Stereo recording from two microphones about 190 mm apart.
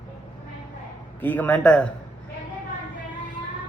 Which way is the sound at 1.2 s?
10° left (ahead or behind).